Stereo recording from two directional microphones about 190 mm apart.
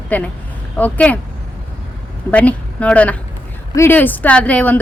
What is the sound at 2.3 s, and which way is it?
A woman's voice, 5° left (ahead or behind).